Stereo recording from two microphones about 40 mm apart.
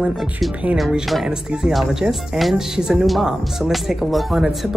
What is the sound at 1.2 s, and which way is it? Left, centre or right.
Speech, centre.